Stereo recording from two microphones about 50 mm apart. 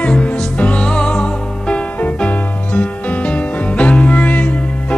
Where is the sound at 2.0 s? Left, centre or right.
Left.